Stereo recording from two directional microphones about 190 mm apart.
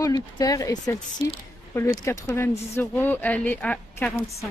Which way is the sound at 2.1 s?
15° left (ahead or behind).